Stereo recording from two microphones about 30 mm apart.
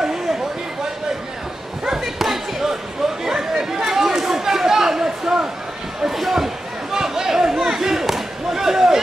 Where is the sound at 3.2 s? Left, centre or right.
Centre.